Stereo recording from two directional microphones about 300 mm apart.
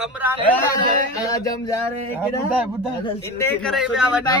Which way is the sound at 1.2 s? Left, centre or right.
Centre.